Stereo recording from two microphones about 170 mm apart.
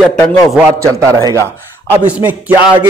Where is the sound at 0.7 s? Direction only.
15° right (ahead or behind).